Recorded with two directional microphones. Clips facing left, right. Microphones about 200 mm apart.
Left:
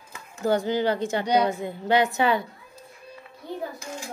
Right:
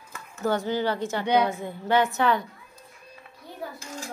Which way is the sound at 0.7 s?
15° left (ahead or behind).